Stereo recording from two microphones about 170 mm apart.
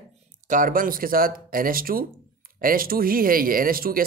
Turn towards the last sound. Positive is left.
turn(degrees=-60)  # may be behind; listen again after turning